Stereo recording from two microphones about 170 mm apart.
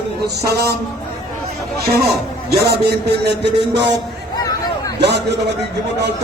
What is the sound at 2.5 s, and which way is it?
Speech, 70° right (ahead or behind).